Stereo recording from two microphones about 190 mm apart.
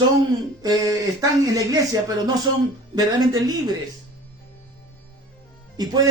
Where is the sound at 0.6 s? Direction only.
20° right (ahead or behind).